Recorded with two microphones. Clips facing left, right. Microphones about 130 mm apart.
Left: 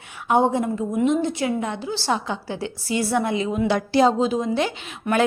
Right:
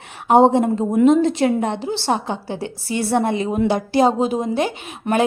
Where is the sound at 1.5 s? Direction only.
60° right (ahead or behind).